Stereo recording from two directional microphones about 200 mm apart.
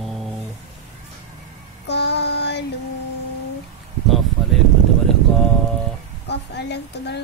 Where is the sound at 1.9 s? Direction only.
60° left (ahead or behind).